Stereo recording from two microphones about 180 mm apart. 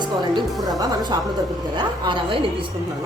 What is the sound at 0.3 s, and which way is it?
Speech, 20° right (ahead or behind).